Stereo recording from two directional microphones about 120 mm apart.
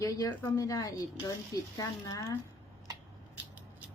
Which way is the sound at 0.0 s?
30° left (ahead or behind).